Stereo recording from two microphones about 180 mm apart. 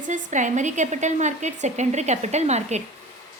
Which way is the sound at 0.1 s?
45° right (ahead or behind).